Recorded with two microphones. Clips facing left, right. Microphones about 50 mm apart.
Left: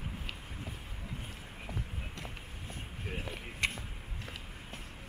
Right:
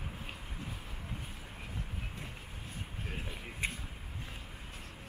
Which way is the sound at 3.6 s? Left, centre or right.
Left.